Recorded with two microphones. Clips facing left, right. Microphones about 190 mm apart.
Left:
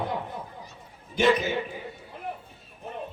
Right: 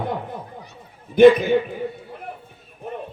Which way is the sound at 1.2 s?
55° right (ahead or behind).